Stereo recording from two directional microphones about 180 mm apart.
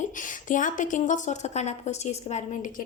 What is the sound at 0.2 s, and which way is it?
A woman's voice, 45° left (ahead or behind).